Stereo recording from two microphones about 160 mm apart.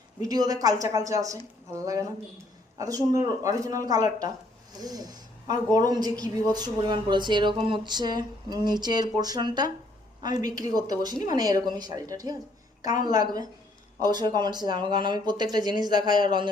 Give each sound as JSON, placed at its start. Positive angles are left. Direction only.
{"t": 0.2, "sound": "speech", "side_deg": -25}